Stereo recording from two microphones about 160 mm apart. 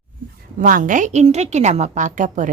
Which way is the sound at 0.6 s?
55° right (ahead or behind).